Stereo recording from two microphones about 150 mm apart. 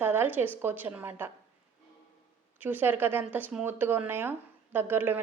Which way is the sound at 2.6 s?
10° right (ahead or behind).